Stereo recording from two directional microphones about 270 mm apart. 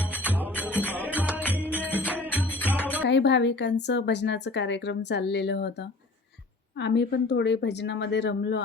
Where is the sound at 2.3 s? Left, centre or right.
Centre.